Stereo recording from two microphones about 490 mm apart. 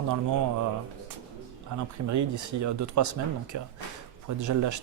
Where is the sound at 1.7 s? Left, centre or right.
Right.